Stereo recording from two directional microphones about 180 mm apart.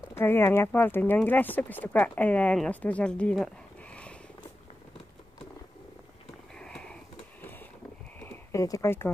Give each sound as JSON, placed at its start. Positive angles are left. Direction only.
{"t": 0.1, "sound": "speech", "side_deg": 10}
{"t": 3.9, "sound": "purr", "side_deg": 5}
{"t": 6.6, "sound": "a sound", "side_deg": 5}
{"t": 8.3, "sound": "speech", "side_deg": 15}